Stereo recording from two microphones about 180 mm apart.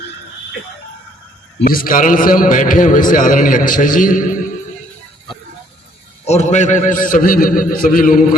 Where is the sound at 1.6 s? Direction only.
55° left (ahead or behind).